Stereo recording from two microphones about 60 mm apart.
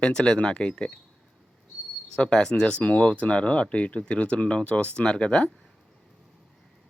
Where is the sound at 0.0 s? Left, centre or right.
Centre.